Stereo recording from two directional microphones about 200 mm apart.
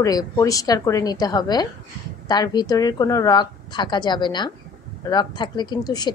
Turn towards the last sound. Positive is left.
turn(degrees=20)  # may be behind; listen again after turning